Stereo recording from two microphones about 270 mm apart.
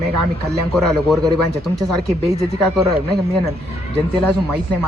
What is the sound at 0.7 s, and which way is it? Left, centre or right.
Speech, centre.